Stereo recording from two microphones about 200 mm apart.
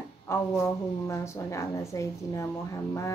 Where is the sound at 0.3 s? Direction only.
15° left (ahead or behind).